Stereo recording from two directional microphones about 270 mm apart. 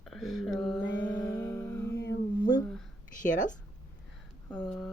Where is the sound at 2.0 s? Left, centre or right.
Left.